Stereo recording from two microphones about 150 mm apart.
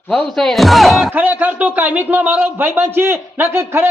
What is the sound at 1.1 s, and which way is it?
A man's voice, 10° right (ahead or behind).